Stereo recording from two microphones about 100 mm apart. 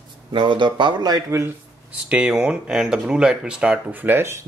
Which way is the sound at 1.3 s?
30° right (ahead or behind).